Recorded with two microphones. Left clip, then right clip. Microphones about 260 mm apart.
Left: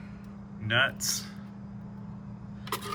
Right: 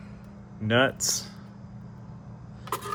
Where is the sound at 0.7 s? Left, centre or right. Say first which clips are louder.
Right 3 dB; right.